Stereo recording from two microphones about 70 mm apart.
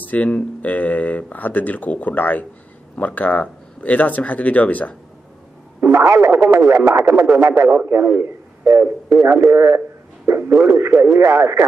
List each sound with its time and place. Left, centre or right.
0.0 s speech: left
5.8 s speech: right